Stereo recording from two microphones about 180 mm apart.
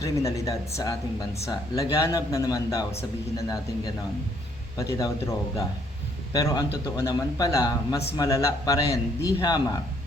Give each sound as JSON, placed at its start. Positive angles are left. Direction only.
{"t": 0.0, "sound": "speech", "side_deg": 15}
{"t": 4.8, "sound": "speech", "side_deg": 15}
{"t": 6.3, "sound": "speech", "side_deg": 20}